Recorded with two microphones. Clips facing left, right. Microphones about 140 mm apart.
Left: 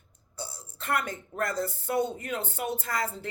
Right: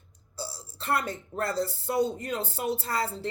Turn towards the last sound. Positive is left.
turn(degrees=-30)  # may be behind; listen again after turning